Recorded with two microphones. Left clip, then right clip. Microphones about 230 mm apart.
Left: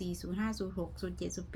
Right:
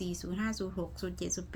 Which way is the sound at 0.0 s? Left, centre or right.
Centre.